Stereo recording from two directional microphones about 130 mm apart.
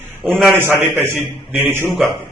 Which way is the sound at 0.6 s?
15° right (ahead or behind).